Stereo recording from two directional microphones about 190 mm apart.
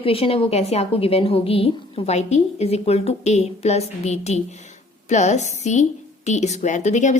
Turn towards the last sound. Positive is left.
turn(degrees=40)  # may be behind; listen again after turning